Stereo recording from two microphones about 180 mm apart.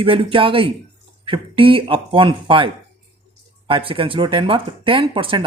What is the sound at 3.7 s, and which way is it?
Speech, 30° right (ahead or behind).